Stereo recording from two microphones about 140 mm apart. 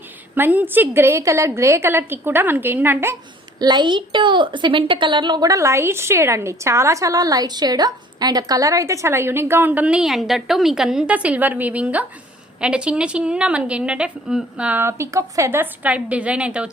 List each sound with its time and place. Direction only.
0.3 s a woman's voice: 15° right (ahead or behind)
3.6 s a woman's voice: 30° right (ahead or behind); by 16.6 s 10° right (ahead or behind)